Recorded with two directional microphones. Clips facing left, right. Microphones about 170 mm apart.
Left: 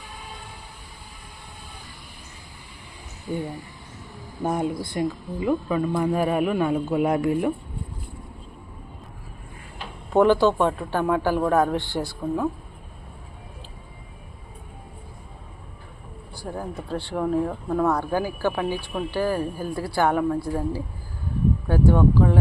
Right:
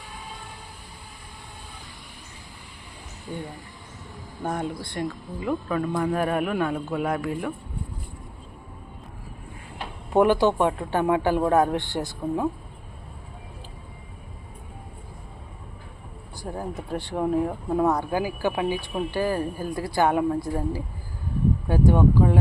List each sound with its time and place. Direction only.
4.4 s speech: 10° left (ahead or behind)
10.1 s speech: 15° right (ahead or behind)
16.4 s speech: 20° right (ahead or behind)